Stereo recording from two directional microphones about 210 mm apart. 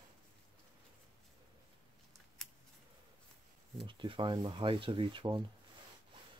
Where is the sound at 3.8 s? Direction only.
20° right (ahead or behind).